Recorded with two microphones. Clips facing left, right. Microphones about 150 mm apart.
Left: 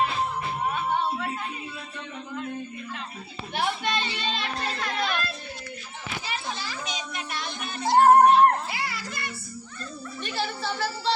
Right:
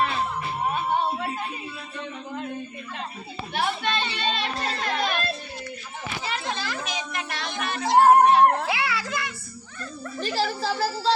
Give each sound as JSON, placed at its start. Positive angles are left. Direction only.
{"t": 3.5, "sound": "speech", "side_deg": 15}
{"t": 4.0, "sound": "a child's voice", "side_deg": -65}
{"t": 4.8, "sound": "a sound", "side_deg": -30}
{"t": 6.4, "sound": "a sound", "side_deg": -90}
{"t": 7.3, "sound": "music", "side_deg": -90}
{"t": 10.2, "sound": "a child's voice", "side_deg": -35}